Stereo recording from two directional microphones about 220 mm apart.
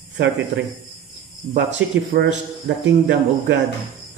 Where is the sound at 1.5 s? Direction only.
55° right (ahead or behind).